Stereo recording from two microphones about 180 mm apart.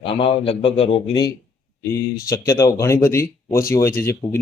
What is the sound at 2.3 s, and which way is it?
Speech, 15° left (ahead or behind).